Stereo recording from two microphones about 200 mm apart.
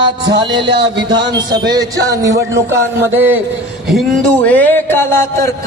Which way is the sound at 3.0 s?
10° right (ahead or behind).